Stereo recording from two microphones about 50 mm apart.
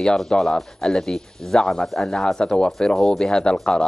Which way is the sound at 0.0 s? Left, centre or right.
Centre.